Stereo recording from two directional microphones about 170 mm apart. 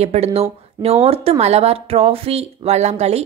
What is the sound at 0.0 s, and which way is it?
Speech, 40° right (ahead or behind).